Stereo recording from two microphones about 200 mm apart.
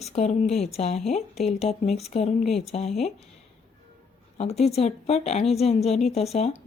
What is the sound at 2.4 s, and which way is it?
Speech, centre (ahead or behind).